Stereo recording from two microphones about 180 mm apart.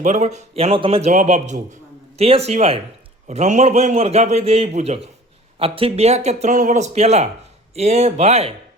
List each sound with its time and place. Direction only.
0.0 s a man's voice: 40° right (ahead or behind)